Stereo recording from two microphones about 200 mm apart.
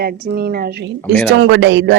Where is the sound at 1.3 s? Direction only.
60° right (ahead or behind).